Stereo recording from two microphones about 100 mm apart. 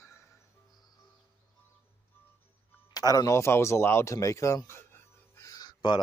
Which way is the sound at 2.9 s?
40° left (ahead or behind).